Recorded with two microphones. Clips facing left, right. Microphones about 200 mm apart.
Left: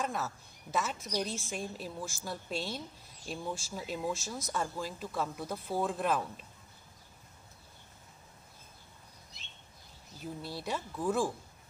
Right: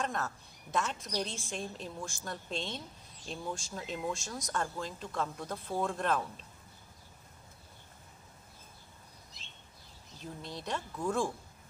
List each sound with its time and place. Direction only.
0.0 s a woman's voice: 5° left (ahead or behind)
10.2 s a woman's voice: 5° left (ahead or behind)